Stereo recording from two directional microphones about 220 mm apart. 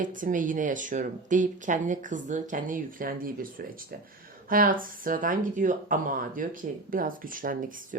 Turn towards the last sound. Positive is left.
turn(degrees=-40)  # may be behind; listen again after turning